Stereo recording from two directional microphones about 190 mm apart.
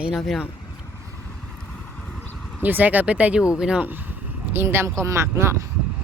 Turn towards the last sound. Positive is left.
turn(degrees=-15)  # may be behind; listen again after turning